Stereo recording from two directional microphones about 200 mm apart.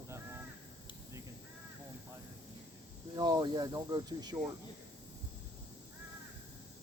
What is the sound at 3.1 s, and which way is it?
Speech, 20° right (ahead or behind).